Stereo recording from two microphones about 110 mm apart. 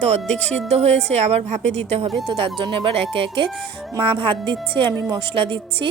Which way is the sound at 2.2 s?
50° right (ahead or behind).